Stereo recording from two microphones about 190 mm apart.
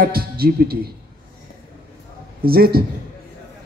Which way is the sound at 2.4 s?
55° right (ahead or behind).